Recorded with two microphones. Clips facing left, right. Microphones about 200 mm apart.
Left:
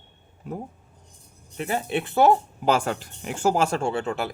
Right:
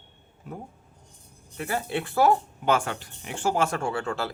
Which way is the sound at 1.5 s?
20° left (ahead or behind).